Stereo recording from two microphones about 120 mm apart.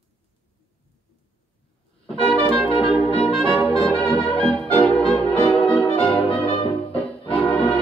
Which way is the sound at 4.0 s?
10° left (ahead or behind).